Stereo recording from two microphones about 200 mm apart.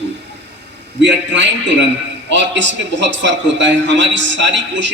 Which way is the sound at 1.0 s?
65° right (ahead or behind).